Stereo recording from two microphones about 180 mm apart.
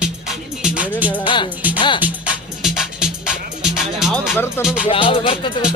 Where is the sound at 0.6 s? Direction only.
5° right (ahead or behind).